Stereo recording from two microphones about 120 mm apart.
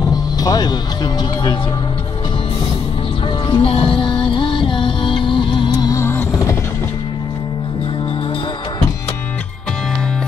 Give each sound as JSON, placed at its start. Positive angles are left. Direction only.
{"t": 0.4, "sound": "speech", "side_deg": 35}
{"t": 3.4, "sound": "music", "side_deg": 45}
{"t": 5.9, "sound": "a sound", "side_deg": 25}